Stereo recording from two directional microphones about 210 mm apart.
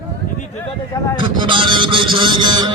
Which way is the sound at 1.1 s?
25° right (ahead or behind).